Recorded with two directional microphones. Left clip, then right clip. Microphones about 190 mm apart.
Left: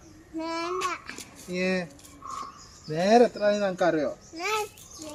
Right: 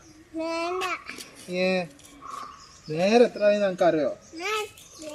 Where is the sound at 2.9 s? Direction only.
Centre (ahead or behind).